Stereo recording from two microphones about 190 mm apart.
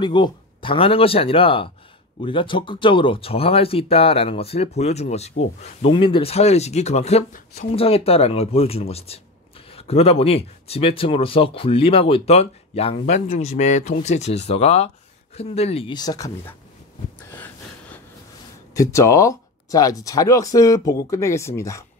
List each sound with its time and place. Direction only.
0.0 s speech: 25° left (ahead or behind)
17.4 s gasp: 10° left (ahead or behind)
18.8 s speech: 15° left (ahead or behind)